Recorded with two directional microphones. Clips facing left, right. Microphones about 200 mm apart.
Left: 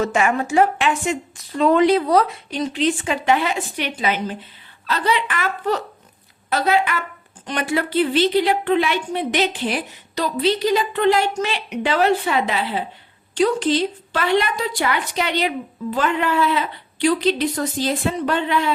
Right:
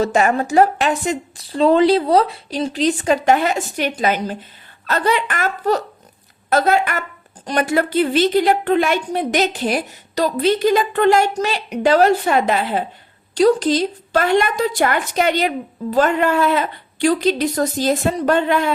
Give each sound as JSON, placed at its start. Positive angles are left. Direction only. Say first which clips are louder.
{"t": 0.0, "sound": "a woman's voice", "louder": "right 3 dB", "side_deg": -35}